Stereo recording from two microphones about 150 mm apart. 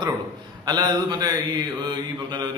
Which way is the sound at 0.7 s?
25° right (ahead or behind).